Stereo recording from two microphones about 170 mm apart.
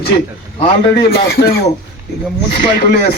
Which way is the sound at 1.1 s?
65° left (ahead or behind).